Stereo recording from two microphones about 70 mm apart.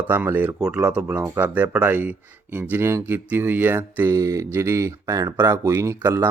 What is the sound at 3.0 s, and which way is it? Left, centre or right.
Speech, right.